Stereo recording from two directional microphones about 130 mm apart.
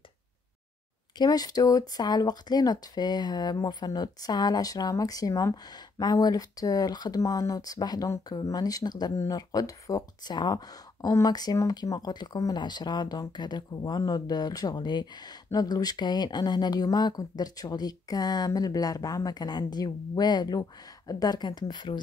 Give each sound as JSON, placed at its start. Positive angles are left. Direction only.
{"t": 1.1, "sound": "speech", "side_deg": 30}